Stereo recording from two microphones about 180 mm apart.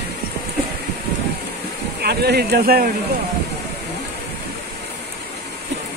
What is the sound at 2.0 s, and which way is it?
Speech, 60° right (ahead or behind).